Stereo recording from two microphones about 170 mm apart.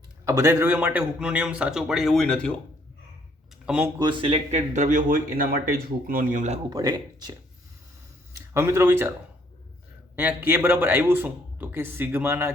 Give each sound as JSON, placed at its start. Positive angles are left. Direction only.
{"t": 0.3, "sound": "a man's voice", "side_deg": -15}
{"t": 3.9, "sound": "speech", "side_deg": -25}
{"t": 6.7, "sound": "speech", "side_deg": -25}
{"t": 10.2, "sound": "a man's voice", "side_deg": -10}